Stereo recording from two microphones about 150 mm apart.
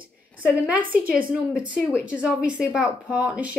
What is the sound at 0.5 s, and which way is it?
A woman's voice, 10° right (ahead or behind).